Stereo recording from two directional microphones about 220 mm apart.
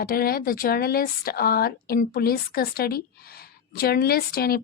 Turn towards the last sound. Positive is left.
turn(degrees=45)  # may be behind; listen again after turning